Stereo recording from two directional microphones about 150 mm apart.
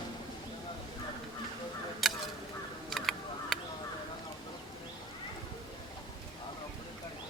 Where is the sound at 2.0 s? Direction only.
Centre (ahead or behind).